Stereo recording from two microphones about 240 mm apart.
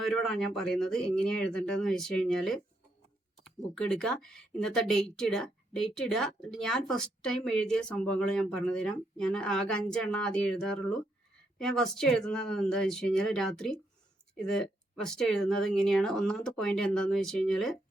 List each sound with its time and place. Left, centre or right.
0.0 s speech: centre